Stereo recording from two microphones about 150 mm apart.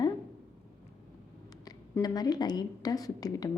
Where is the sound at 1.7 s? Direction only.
25° left (ahead or behind).